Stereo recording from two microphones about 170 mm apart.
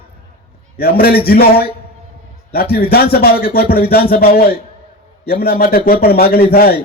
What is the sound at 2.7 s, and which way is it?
Music, 65° left (ahead or behind).